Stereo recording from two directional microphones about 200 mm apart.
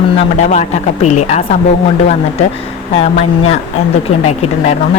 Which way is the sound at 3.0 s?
35° left (ahead or behind).